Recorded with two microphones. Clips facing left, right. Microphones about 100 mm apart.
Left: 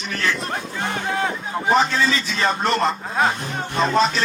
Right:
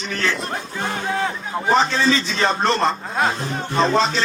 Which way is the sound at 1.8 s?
30° right (ahead or behind).